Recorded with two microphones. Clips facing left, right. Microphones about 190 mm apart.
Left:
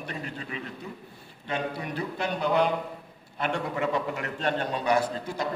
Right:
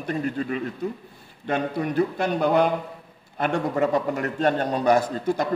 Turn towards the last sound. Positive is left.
turn(degrees=-45)  # may be behind; listen again after turning